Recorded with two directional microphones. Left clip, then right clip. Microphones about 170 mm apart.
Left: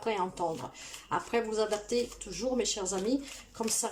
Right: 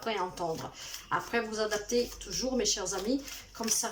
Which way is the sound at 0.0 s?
20° left (ahead or behind).